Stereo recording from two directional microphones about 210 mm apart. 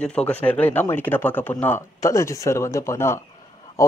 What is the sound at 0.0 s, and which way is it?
Speech, 5° left (ahead or behind).